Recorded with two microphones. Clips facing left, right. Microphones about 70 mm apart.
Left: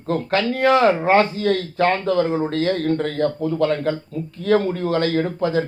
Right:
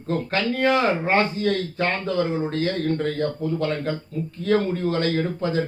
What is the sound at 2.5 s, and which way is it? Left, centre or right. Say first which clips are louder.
A man's voice: left 4 dB; left.